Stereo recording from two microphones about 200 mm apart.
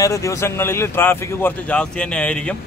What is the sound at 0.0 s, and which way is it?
A man's voice, 15° left (ahead or behind).